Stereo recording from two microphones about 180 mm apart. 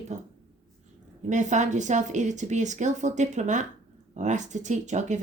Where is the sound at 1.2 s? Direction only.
40° right (ahead or behind).